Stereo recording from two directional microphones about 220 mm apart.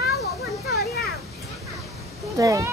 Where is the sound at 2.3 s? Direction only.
15° right (ahead or behind).